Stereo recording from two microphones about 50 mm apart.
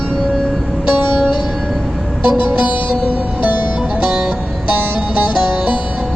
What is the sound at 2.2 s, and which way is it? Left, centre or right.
Music, right.